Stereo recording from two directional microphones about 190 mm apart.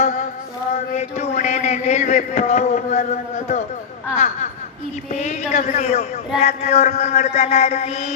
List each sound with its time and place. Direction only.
0.0 s a sound: 45° left (ahead or behind)
0.9 s a man's voice: 40° left (ahead or behind)
5.2 s a man's voice: 40° left (ahead or behind)